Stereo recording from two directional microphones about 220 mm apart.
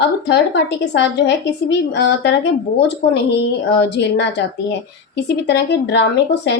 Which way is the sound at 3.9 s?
50° left (ahead or behind).